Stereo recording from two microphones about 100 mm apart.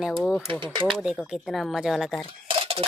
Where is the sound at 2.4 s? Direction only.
70° right (ahead or behind).